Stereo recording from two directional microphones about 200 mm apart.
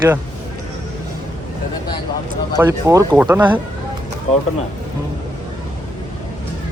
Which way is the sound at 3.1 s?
Centre (ahead or behind).